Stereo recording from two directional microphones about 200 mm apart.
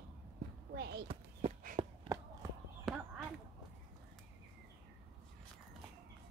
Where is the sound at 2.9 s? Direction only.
Centre (ahead or behind).